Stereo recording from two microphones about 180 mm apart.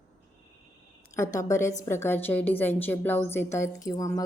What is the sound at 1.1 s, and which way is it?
A woman's voice, 15° left (ahead or behind).